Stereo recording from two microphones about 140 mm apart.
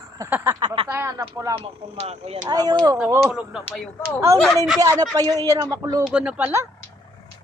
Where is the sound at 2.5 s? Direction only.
30° right (ahead or behind).